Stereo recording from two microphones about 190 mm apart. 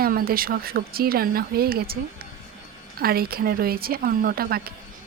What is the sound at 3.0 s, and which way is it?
Speech, 55° right (ahead or behind).